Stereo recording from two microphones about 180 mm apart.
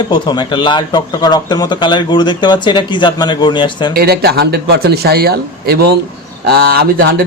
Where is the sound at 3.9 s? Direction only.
60° right (ahead or behind).